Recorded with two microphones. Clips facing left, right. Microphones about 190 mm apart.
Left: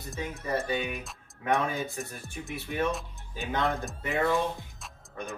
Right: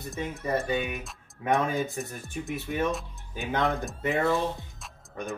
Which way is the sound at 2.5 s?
15° right (ahead or behind).